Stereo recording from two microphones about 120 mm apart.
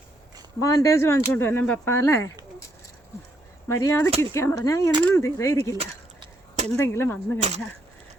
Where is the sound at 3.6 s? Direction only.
25° left (ahead or behind).